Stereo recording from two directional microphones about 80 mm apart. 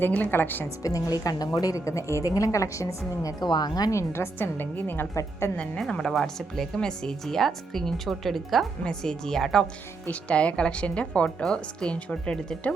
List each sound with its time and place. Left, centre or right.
0.0 s a woman's voice: left
0.8 s a woman's voice: left
3.4 s a woman's voice: left
3.9 s a woman's voice: left
5.8 s a woman's voice: centre